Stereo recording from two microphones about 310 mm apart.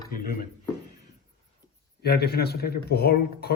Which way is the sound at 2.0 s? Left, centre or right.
Left.